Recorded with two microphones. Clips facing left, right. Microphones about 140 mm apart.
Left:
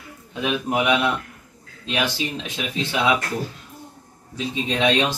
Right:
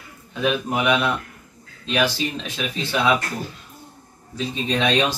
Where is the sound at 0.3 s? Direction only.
15° left (ahead or behind).